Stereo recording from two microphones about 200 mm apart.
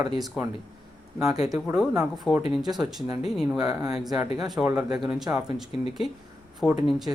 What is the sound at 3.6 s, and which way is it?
Speech, 15° right (ahead or behind).